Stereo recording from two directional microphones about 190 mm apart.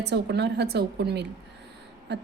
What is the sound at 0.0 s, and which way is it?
A woman's voice, 60° right (ahead or behind).